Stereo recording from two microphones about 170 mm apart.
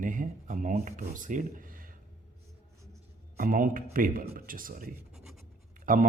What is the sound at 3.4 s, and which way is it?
Speech, 55° right (ahead or behind).